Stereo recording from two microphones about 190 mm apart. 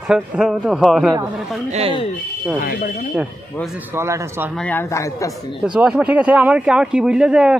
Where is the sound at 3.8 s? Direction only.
10° right (ahead or behind).